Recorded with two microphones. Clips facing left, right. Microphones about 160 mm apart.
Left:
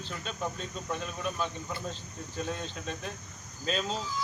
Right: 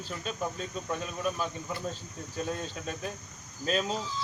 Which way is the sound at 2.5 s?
5° right (ahead or behind).